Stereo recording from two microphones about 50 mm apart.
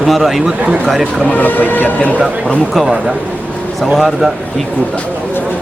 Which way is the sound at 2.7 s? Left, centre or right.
Centre.